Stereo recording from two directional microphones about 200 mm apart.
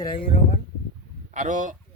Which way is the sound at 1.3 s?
40° right (ahead or behind).